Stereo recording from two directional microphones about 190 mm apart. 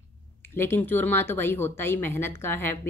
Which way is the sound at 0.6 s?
10° left (ahead or behind).